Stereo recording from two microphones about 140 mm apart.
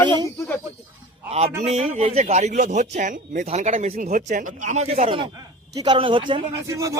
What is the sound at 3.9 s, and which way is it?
Speech, 90° right.